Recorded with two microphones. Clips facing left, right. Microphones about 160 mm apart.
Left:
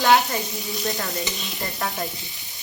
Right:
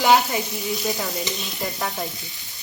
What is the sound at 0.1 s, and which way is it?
Speech, centre (ahead or behind).